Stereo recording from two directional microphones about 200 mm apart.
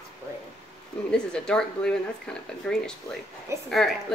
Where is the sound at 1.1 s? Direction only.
5° left (ahead or behind).